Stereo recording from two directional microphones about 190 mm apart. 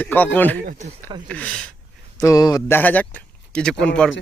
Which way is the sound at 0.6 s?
40° right (ahead or behind).